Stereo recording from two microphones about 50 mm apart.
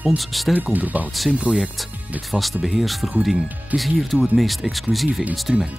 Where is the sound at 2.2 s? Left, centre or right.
Centre.